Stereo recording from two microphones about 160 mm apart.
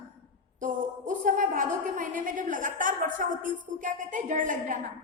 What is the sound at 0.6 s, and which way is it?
A woman's voice, 55° right (ahead or behind).